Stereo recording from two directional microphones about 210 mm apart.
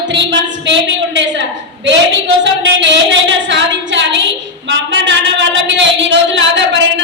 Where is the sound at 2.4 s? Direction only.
60° right (ahead or behind).